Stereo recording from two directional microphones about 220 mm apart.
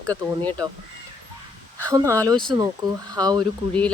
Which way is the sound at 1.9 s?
15° right (ahead or behind).